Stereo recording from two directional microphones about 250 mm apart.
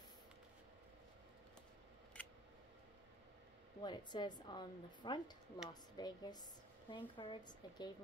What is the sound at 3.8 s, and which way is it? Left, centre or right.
A woman's voice, centre.